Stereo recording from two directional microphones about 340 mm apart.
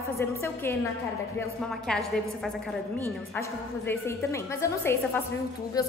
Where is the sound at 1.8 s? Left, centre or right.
Centre.